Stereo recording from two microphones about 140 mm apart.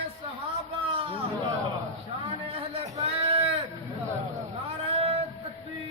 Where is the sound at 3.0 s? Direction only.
45° right (ahead or behind).